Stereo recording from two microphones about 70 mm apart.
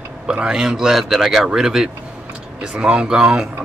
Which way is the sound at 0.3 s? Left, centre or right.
Centre.